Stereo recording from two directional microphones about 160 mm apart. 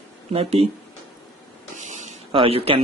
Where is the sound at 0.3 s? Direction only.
40° right (ahead or behind).